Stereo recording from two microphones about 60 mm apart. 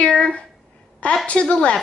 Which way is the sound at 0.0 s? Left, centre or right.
Centre.